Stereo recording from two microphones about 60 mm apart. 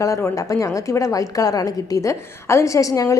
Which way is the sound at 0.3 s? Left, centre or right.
Left.